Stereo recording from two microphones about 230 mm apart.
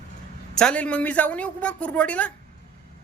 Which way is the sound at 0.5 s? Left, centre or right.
Centre.